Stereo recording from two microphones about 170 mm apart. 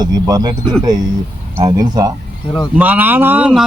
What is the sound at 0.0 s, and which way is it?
Speech, 25° right (ahead or behind).